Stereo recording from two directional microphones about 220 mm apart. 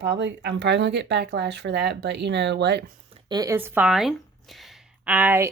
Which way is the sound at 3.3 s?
15° right (ahead or behind).